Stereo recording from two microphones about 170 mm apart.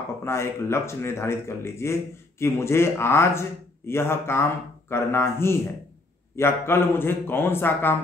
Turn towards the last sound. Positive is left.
turn(degrees=10)  # may be behind; listen again after turning